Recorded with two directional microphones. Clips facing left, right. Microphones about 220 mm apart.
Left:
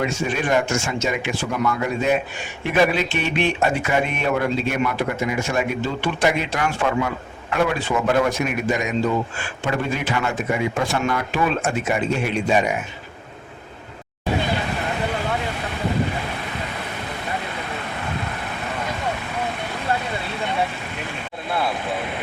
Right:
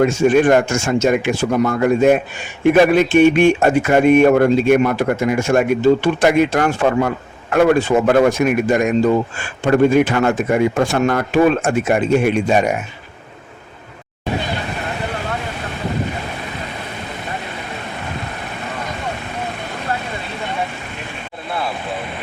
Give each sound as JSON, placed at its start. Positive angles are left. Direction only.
{"t": 0.0, "sound": "speech", "side_deg": -50}